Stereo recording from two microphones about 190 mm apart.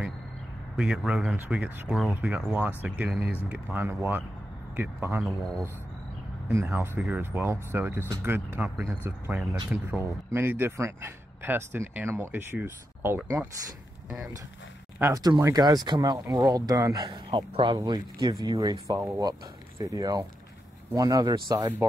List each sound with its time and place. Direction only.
0.7 s speech: 5° right (ahead or behind)
6.5 s speech: 10° right (ahead or behind)
15.0 s speech: 15° right (ahead or behind)